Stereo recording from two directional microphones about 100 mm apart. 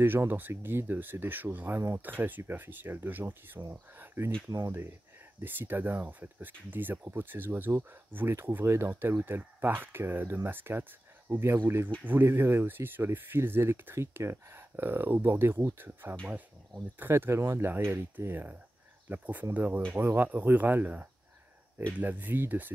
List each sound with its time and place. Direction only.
0.0 s speech: 20° right (ahead or behind)
4.0 s a sound: 20° right (ahead or behind)
4.5 s speech: 30° right (ahead or behind)